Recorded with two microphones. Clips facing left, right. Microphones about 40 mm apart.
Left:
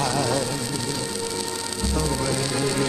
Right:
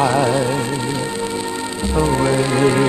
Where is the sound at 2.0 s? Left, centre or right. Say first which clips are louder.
Right 10 dB; right.